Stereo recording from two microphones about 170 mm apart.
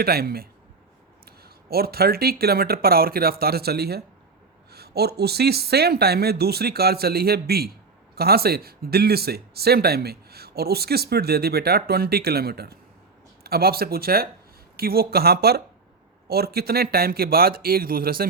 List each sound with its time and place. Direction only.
0.0 s speech: 65° right (ahead or behind)